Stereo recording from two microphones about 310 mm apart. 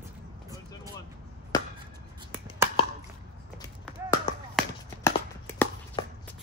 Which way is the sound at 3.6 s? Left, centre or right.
Centre.